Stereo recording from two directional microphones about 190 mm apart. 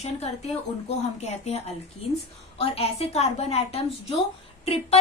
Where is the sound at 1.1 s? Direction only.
35° left (ahead or behind).